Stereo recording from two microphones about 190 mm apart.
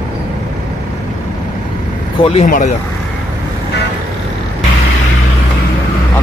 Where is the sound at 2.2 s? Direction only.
35° left (ahead or behind).